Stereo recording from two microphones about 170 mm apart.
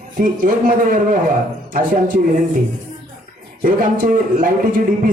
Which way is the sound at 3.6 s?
50° right (ahead or behind).